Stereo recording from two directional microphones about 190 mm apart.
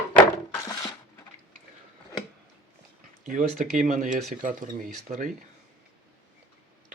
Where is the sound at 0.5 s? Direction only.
15° left (ahead or behind).